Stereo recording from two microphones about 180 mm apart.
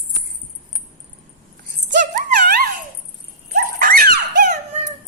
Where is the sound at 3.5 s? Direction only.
50° right (ahead or behind).